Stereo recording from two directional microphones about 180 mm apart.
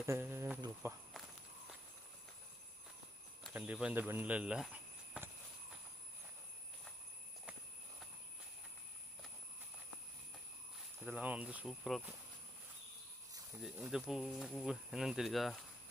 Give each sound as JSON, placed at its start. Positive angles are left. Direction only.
{"t": 0.0, "sound": "insect", "side_deg": -15}
{"t": 0.8, "sound": "speech", "side_deg": -15}
{"t": 3.5, "sound": "speech", "side_deg": -5}
{"t": 11.0, "sound": "speech", "side_deg": -10}
{"t": 13.6, "sound": "speech", "side_deg": -5}